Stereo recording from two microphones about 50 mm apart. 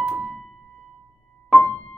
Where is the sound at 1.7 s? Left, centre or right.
Left.